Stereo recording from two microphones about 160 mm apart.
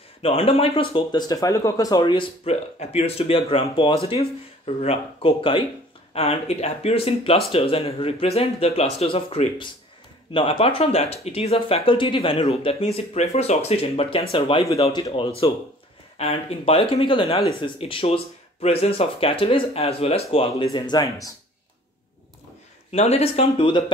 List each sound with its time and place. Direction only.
0.2 s speech: 35° left (ahead or behind)
2.4 s speech: 40° left (ahead or behind)
20.7 s speech: 25° left (ahead or behind)
22.8 s speech: 40° left (ahead or behind)